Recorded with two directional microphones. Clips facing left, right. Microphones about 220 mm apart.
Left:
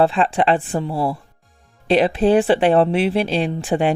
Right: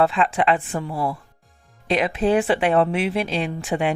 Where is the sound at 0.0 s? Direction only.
30° left (ahead or behind).